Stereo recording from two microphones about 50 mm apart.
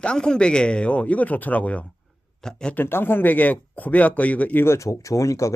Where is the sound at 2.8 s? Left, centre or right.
Left.